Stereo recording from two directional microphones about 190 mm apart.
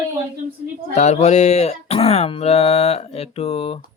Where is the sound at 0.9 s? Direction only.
35° left (ahead or behind).